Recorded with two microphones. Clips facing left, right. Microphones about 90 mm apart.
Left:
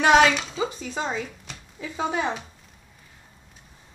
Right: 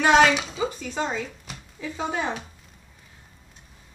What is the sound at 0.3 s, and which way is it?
Speech, 10° right (ahead or behind).